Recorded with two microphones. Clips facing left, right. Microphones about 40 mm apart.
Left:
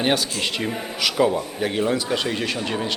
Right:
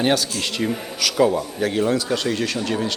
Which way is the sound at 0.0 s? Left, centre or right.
Centre.